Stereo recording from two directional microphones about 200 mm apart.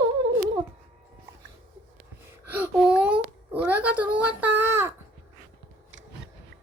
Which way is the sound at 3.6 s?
10° right (ahead or behind).